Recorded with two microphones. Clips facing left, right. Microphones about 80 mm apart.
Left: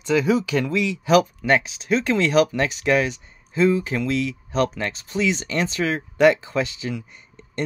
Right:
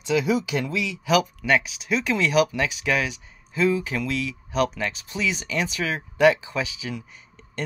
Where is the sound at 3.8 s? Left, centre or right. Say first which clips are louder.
Left 4 dB; left.